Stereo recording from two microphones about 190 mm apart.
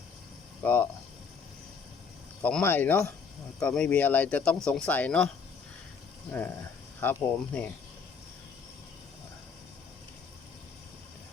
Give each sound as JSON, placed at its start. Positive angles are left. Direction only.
{"t": 0.6, "sound": "speech", "side_deg": 10}
{"t": 2.4, "sound": "speech", "side_deg": 5}
{"t": 7.0, "sound": "speech", "side_deg": 10}